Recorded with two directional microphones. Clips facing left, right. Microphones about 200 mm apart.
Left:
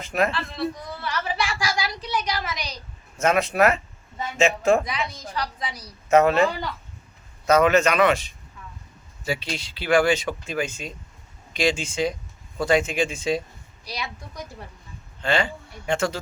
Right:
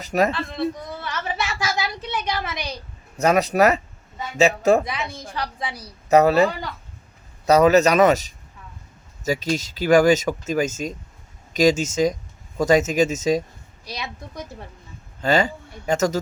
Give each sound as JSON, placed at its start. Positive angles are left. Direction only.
{"t": 0.0, "sound": "speech", "side_deg": -40}
{"t": 0.3, "sound": "a sound", "side_deg": -20}
{"t": 3.2, "sound": "speech", "side_deg": -40}
{"t": 5.2, "sound": "speech", "side_deg": -25}
{"t": 13.8, "sound": "a woman's voice", "side_deg": -20}
{"t": 15.2, "sound": "speech", "side_deg": -40}